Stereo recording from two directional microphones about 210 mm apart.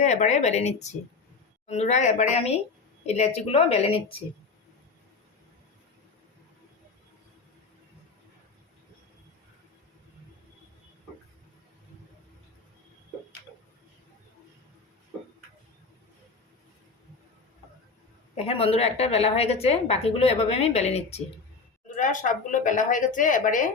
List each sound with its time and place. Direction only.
0.0 s a woman's voice: 35° left (ahead or behind)
18.3 s a woman's voice: 30° left (ahead or behind)